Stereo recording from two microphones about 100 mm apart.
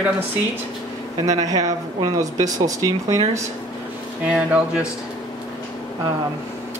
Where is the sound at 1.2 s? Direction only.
35° right (ahead or behind).